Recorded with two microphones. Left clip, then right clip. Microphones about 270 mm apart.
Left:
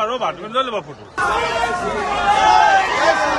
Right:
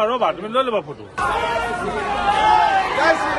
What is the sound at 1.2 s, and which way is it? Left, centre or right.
Speech, left.